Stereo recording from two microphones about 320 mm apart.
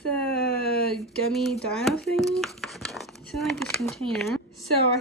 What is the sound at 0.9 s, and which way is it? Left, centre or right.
Speech, centre.